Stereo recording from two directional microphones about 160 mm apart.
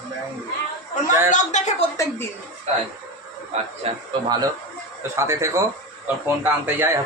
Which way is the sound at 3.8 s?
40° right (ahead or behind).